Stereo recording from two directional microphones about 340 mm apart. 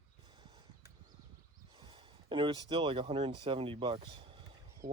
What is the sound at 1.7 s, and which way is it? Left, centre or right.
Speech, centre.